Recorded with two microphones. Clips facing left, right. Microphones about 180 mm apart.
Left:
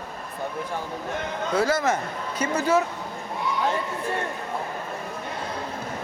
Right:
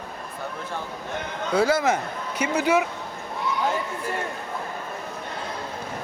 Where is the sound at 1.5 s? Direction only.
10° right (ahead or behind).